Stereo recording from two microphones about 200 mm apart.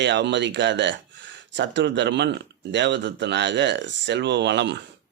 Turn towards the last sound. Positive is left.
turn(degrees=-60)  # may be behind; listen again after turning